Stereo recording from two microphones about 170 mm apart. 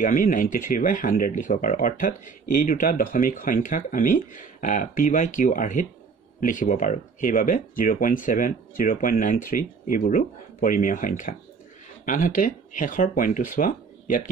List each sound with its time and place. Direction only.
0.0 s speech: 50° left (ahead or behind)